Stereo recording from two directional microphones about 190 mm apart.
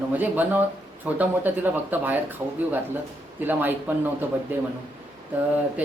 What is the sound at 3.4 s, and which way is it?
Speech, 10° right (ahead or behind).